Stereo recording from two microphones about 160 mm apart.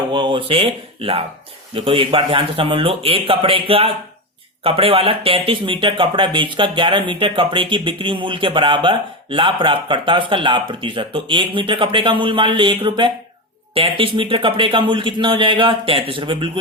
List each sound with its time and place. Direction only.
0.1 s speech: 30° right (ahead or behind)